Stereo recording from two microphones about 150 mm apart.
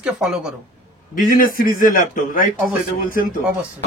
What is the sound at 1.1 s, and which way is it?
A man's voice, 65° left (ahead or behind).